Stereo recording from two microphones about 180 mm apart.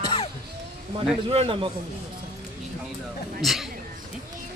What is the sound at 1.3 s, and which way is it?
Speech, 30° right (ahead or behind).